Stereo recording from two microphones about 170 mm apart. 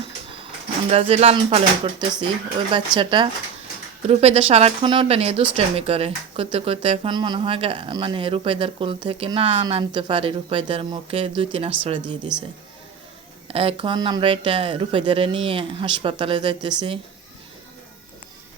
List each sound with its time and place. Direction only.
0.9 s speech: 40° right (ahead or behind)
13.5 s speech: 35° right (ahead or behind)